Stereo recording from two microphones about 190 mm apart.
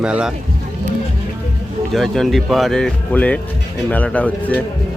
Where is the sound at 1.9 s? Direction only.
Centre (ahead or behind).